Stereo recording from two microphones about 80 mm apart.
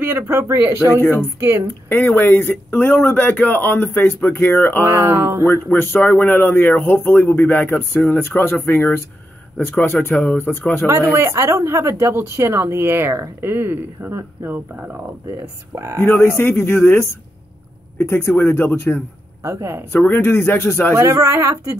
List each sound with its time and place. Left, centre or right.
0.0 s speech: right
1.9 s a man's voice: left
4.8 s speech: right
5.5 s a man's voice: left
10.9 s speech: right
15.7 s speech: right
16.3 s a man's voice: left
19.4 s speech: right
19.9 s a man's voice: left
20.9 s speech: right